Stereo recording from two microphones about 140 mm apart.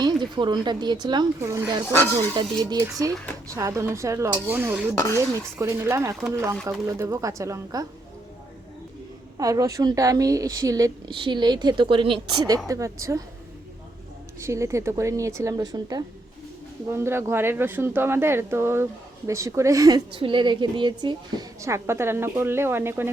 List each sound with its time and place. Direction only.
0.0 s a woman's voice: 30° right (ahead or behind)
1.9 s speech: 15° left (ahead or behind)
2.3 s a woman's voice: 30° right (ahead or behind); by 4.9 s 15° right (ahead or behind)
4.9 s speech: 20° left (ahead or behind)
5.5 s a woman's voice: 20° right (ahead or behind)
9.4 s a woman's voice: 25° right (ahead or behind)
14.3 s a woman's voice: 20° right (ahead or behind)
16.9 s a woman's voice: 15° right (ahead or behind)
20.1 s a woman's voice: 35° right (ahead or behind); by 23.1 s 15° right (ahead or behind)